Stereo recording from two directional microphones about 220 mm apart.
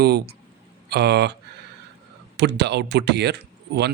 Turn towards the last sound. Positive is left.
turn(degrees=-50)  # may be behind; listen again after turning